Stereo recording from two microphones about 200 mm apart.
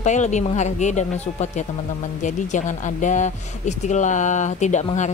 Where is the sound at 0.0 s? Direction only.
35° left (ahead or behind).